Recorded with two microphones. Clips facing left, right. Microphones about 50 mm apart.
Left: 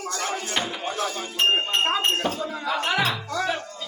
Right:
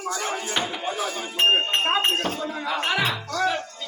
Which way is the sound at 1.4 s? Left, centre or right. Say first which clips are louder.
Right 1 dB; centre.